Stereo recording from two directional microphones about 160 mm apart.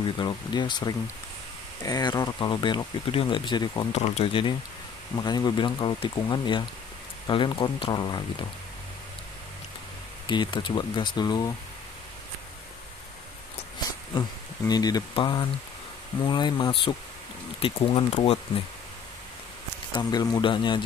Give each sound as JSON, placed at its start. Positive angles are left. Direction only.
{"t": 0.2, "sound": "speech", "side_deg": 25}
{"t": 3.9, "sound": "speech", "side_deg": 45}
{"t": 10.2, "sound": "speech", "side_deg": 30}
{"t": 14.7, "sound": "speech", "side_deg": 25}
{"t": 19.9, "sound": "speech", "side_deg": 25}